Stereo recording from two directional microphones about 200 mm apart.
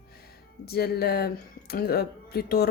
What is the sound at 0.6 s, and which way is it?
A woman's voice, 50° left (ahead or behind).